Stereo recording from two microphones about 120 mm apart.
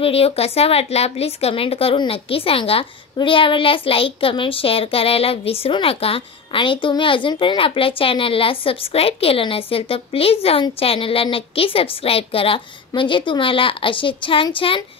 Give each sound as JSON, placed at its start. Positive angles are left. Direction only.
{"t": 0.0, "sound": "a child's voice", "side_deg": 55}